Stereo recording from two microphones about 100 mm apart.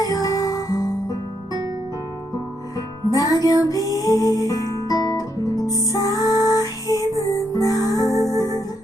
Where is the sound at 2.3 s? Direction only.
35° left (ahead or behind).